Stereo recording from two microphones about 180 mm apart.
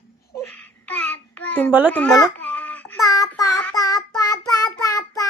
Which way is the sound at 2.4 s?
10° left (ahead or behind).